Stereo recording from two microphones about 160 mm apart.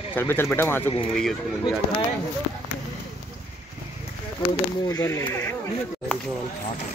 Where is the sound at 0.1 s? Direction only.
15° left (ahead or behind).